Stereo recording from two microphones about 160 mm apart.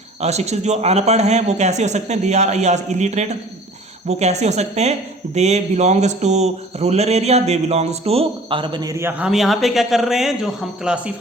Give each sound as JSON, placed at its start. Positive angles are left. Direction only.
{"t": 0.2, "sound": "a man's voice", "side_deg": -45}